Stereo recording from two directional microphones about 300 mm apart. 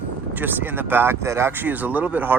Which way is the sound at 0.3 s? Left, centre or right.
Centre.